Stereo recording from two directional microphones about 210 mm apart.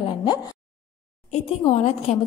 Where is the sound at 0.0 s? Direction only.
25° left (ahead or behind).